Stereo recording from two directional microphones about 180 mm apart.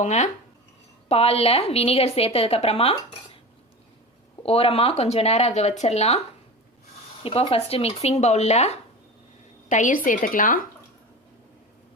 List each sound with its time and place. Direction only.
0.0 s a woman's voice: 40° left (ahead or behind)
4.4 s a woman's voice: 30° left (ahead or behind)
7.2 s a woman's voice: 30° left (ahead or behind); by 10.7 s 50° left (ahead or behind)